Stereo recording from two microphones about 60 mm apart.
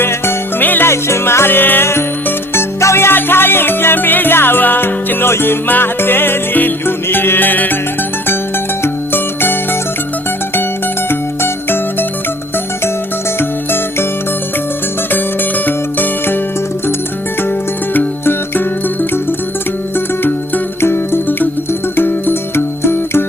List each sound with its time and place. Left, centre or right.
0.0 s music: left
0.9 s music: left
8.8 s music: left
11.1 s music: left
15.6 s music: left
17.9 s music: left
20.8 s music: left